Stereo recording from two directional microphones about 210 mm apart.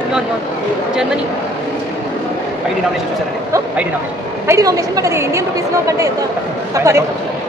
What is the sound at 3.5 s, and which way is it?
A woman's voice, 15° right (ahead or behind).